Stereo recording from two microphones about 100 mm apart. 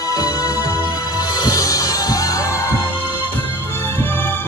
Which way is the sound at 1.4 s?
35° left (ahead or behind).